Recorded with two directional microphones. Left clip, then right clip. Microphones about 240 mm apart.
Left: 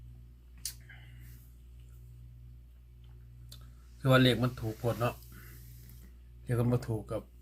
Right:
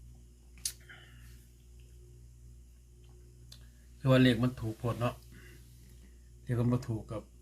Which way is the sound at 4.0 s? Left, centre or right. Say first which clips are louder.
Left 1 dB; centre.